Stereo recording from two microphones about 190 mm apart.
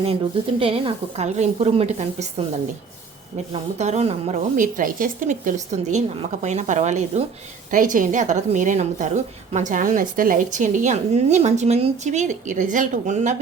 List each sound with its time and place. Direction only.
0.6 s a woman's voice: 30° right (ahead or behind)
3.5 s a woman's voice: 35° right (ahead or behind)